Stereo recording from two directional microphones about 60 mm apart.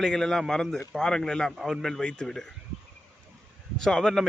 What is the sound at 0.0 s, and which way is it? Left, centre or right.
Speech, centre.